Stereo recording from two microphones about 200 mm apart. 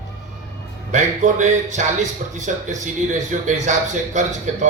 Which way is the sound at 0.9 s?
35° right (ahead or behind).